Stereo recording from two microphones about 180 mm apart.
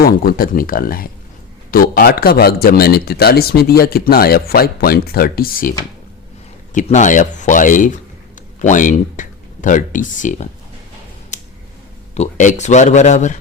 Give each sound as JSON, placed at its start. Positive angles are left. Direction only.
{"t": 0.0, "sound": "speech", "side_deg": 55}
{"t": 6.7, "sound": "speech", "side_deg": 40}
{"t": 11.3, "sound": "a sound", "side_deg": 40}
{"t": 12.1, "sound": "speech", "side_deg": 40}